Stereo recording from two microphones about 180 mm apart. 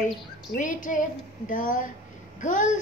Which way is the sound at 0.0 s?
45° left (ahead or behind).